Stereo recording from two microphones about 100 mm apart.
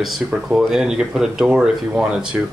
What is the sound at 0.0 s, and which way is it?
Speech, 5° right (ahead or behind).